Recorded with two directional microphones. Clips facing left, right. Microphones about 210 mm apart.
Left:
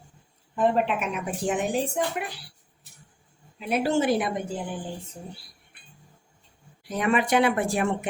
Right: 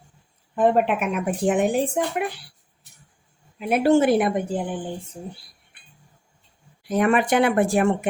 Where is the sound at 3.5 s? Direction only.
55° right (ahead or behind).